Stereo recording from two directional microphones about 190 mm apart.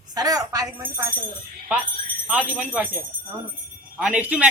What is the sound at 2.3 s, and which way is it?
Speech, 5° right (ahead or behind).